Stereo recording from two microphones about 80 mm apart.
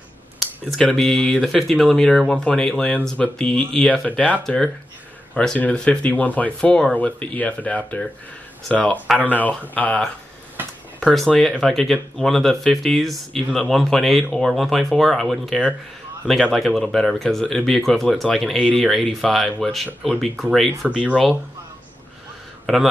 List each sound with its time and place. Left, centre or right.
0.4 s a sound: centre
0.9 s speech: centre
11.1 s speech: centre
20.9 s speech: centre
22.7 s speech: centre